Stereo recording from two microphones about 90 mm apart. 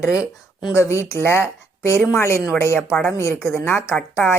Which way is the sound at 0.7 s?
30° left (ahead or behind).